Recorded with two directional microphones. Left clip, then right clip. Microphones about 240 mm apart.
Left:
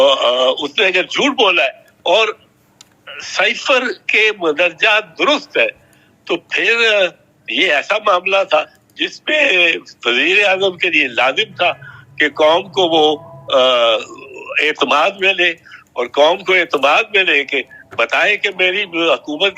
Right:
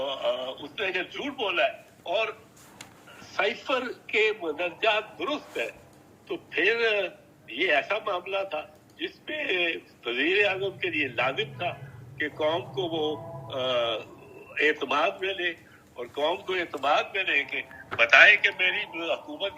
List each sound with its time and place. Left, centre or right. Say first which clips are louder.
0.0 s a man's voice: left 18 dB; left